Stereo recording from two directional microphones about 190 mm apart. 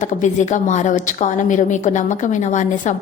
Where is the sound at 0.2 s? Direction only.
40° left (ahead or behind).